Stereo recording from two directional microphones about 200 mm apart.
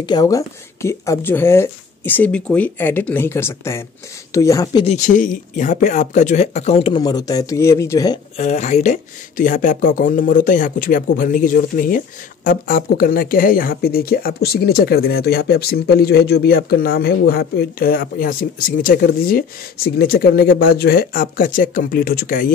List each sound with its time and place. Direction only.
0.0 s speech: 20° left (ahead or behind)
4.8 s speech: 40° left (ahead or behind); by 8.2 s 15° left (ahead or behind)
8.4 s speech: 35° left (ahead or behind)